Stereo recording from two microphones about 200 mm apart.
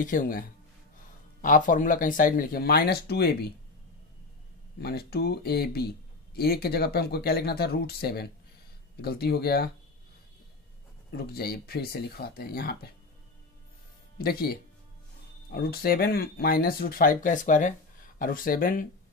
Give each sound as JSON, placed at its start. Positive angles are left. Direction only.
{"t": 0.0, "sound": "speech", "side_deg": 40}
{"t": 4.7, "sound": "speech", "side_deg": 50}
{"t": 11.1, "sound": "speech", "side_deg": 50}
{"t": 14.1, "sound": "speech", "side_deg": 50}